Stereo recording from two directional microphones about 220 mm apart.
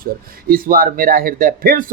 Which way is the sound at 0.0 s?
40° right (ahead or behind).